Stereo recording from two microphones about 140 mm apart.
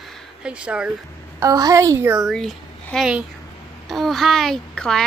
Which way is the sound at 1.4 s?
25° right (ahead or behind).